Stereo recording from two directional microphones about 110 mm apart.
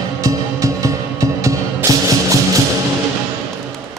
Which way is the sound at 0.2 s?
30° right (ahead or behind).